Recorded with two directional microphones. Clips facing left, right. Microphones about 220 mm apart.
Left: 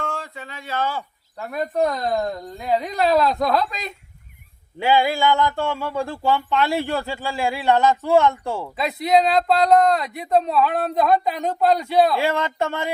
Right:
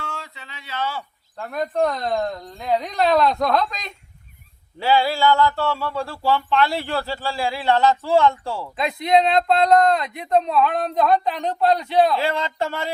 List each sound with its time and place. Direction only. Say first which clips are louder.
0.0 s speech: left 5 dB; 50° left (ahead or behind)
1.4 s speech: even; 5° left (ahead or behind)
4.8 s speech: even; 15° left (ahead or behind)
8.7 s speech: even; 5° left (ahead or behind)